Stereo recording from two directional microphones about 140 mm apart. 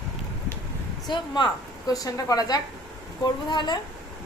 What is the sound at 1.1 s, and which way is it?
Speech, 35° left (ahead or behind).